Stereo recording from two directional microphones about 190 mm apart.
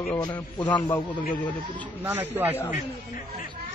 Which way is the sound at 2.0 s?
10° right (ahead or behind).